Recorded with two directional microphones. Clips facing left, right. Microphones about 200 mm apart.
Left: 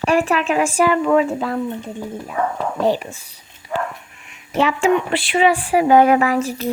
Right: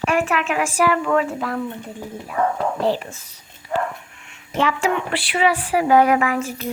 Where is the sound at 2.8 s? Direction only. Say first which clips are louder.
Left 6 dB; 15° left (ahead or behind).